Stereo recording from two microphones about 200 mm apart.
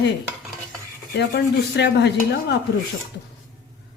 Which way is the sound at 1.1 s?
60° left (ahead or behind).